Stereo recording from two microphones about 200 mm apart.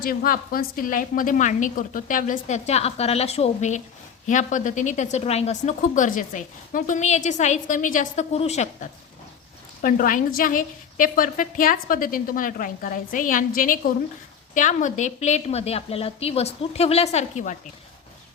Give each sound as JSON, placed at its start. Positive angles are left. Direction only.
{"t": 0.0, "sound": "a woman's voice", "side_deg": 45}